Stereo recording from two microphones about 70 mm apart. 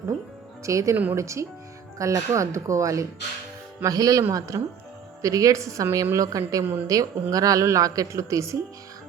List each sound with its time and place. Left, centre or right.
0.6 s a woman's voice: right